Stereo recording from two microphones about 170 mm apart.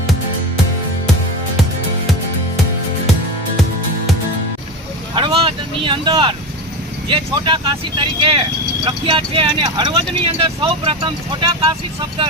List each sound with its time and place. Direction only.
5.1 s vehicle: 30° right (ahead or behind)
7.1 s speech: 30° right (ahead or behind)